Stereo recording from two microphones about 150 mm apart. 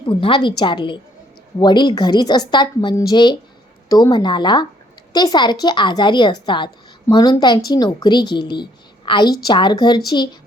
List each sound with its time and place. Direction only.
0.0 s a woman's voice: 35° left (ahead or behind)